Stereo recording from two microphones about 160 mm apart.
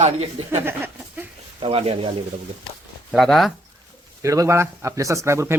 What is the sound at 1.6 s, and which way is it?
Speech, 40° right (ahead or behind).